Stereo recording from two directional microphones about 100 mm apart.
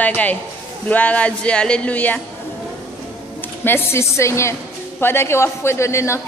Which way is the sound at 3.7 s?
25° left (ahead or behind).